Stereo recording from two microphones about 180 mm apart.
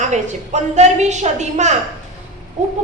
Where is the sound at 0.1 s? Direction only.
40° right (ahead or behind).